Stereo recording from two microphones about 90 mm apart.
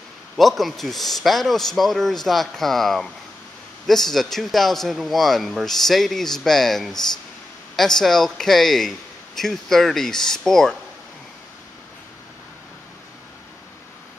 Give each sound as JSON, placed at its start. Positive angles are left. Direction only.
{"t": 0.4, "sound": "a man's voice", "side_deg": 0}